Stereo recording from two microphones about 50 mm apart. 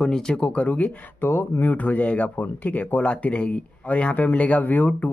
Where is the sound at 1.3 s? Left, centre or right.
Left.